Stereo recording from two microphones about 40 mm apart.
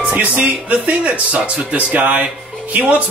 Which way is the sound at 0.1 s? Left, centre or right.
Right.